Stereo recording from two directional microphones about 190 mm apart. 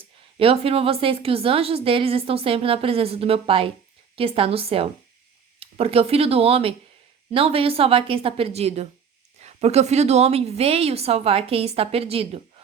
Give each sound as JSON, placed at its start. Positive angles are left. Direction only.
{"t": 0.3, "sound": "a woman's voice", "side_deg": -30}